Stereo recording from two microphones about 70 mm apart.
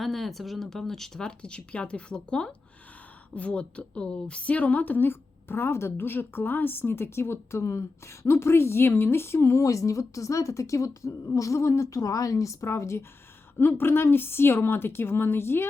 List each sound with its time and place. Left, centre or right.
0.0 s a woman's voice: centre; by 13.1 s left
13.6 s a woman's voice: left